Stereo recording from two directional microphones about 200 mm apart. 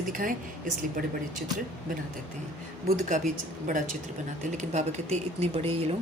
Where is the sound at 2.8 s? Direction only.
35° right (ahead or behind).